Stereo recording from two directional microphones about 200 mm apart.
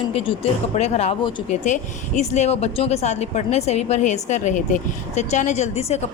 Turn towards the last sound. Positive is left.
turn(degrees=30)  # may be behind; listen again after turning